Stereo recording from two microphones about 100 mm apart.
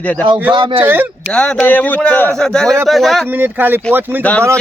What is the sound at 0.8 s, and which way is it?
Speech, 20° right (ahead or behind).